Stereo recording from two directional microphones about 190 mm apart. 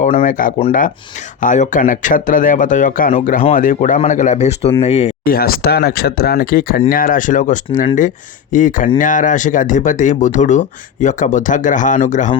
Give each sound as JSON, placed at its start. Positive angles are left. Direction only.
{"t": 0.2, "sound": "speech", "side_deg": 45}
{"t": 5.2, "sound": "speech", "side_deg": 50}